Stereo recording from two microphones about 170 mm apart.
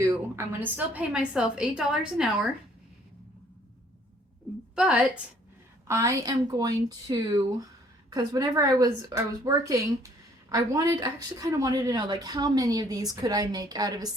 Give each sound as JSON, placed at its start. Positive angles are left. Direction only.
{"t": 0.3, "sound": "a woman's voice", "side_deg": -10}
{"t": 4.7, "sound": "a woman's voice", "side_deg": -5}
{"t": 5.9, "sound": "speech", "side_deg": -20}